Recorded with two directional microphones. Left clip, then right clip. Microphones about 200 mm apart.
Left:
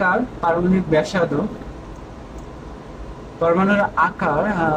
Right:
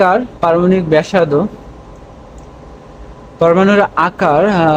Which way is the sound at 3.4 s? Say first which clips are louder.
Right 7 dB; 50° right (ahead or behind).